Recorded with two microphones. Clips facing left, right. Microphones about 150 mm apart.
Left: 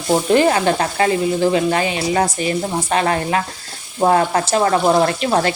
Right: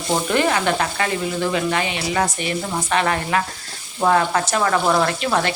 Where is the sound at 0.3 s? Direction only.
30° left (ahead or behind).